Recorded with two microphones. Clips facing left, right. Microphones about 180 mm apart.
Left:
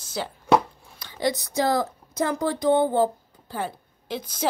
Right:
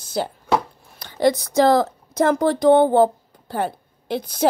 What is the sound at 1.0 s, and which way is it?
Speech, 70° right (ahead or behind).